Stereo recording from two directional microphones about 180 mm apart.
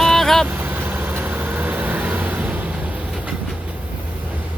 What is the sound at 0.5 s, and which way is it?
Vehicle, 10° right (ahead or behind).